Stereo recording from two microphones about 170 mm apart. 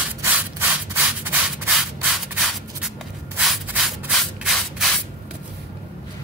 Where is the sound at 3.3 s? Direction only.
5° right (ahead or behind).